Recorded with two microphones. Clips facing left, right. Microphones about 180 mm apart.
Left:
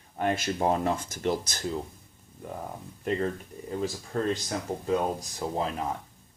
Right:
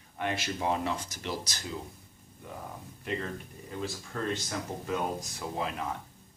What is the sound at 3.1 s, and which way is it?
Speech, 45° left (ahead or behind).